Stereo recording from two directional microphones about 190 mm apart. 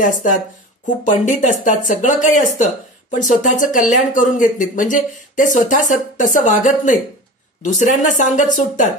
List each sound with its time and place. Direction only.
0.0 s speech: 45° left (ahead or behind)